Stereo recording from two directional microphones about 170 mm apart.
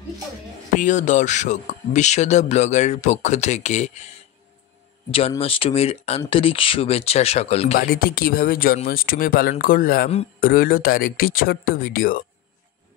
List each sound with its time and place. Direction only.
0.7 s speech: 45° left (ahead or behind)
5.4 s speech: 35° left (ahead or behind)
7.8 s speech: 60° left (ahead or behind)